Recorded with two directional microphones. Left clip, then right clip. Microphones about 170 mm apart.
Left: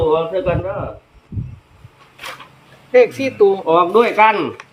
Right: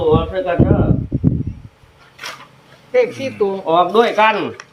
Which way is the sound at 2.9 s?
90° left.